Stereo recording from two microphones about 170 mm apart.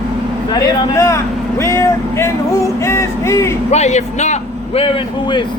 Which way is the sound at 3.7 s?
40° left (ahead or behind).